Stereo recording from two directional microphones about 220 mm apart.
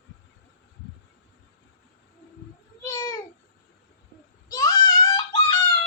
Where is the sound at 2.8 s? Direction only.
15° left (ahead or behind).